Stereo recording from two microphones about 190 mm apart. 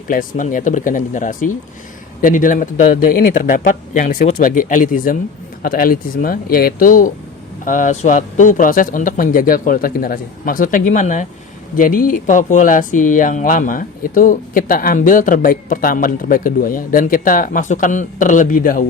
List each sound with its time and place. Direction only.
0.1 s speech: 45° left (ahead or behind)